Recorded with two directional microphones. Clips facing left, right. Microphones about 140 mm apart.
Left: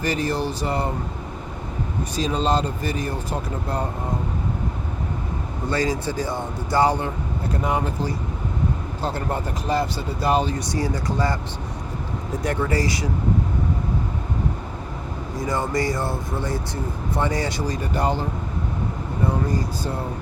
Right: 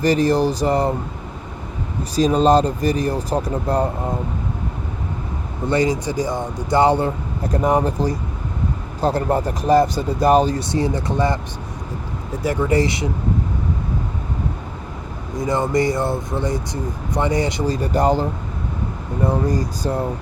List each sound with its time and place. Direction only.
0.0 s speech: 40° right (ahead or behind)
2.1 s speech: 45° right (ahead or behind)
5.6 s speech: 20° right (ahead or behind)
7.5 s speech: 40° right (ahead or behind)
10.6 s speech: 25° right (ahead or behind)
12.3 s speech: 5° right (ahead or behind)
12.6 s speech: 25° right (ahead or behind)
15.4 s speech: 20° right (ahead or behind)
17.9 s speech: 40° right (ahead or behind)
19.5 s speech: 40° right (ahead or behind)